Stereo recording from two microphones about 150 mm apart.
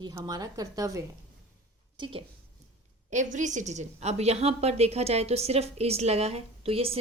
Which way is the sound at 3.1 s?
55° right (ahead or behind).